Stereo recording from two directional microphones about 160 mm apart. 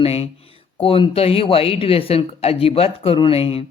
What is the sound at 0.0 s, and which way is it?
Speech, 40° left (ahead or behind).